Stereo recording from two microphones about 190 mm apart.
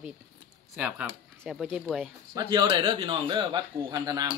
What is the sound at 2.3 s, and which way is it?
A man's voice, 20° right (ahead or behind).